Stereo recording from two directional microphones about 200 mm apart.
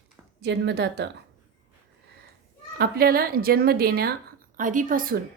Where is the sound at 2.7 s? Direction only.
50° right (ahead or behind).